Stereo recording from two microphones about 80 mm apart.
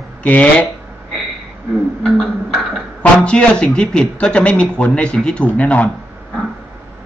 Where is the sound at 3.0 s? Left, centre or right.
Centre.